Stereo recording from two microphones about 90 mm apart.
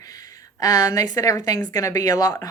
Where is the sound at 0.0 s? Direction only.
45° left (ahead or behind).